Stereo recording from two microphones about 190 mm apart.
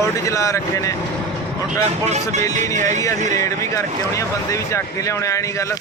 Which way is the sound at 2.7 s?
40° right (ahead or behind).